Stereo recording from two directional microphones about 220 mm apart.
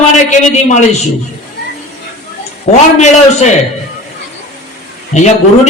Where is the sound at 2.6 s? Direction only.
30° left (ahead or behind).